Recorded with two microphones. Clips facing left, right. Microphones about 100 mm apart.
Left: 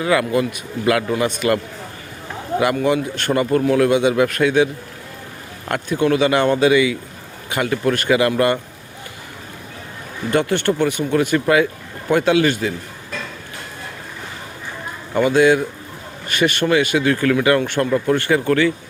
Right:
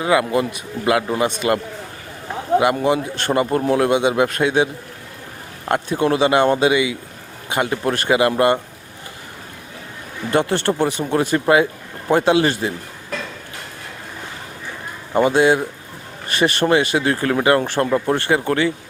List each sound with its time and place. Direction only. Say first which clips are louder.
0.0 s speech: even; 25° right (ahead or behind)
2.6 s speech: even; 25° right (ahead or behind)
10.3 s speech: even; 30° right (ahead or behind)
15.1 s speech: left 1 dB; 30° right (ahead or behind)